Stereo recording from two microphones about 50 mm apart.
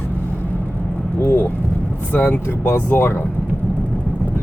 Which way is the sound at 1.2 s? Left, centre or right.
Left.